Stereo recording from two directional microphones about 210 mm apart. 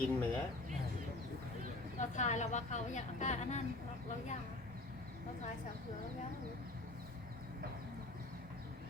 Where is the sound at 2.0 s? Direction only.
35° left (ahead or behind).